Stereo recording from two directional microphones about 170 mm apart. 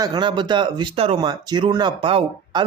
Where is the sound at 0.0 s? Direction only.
25° right (ahead or behind).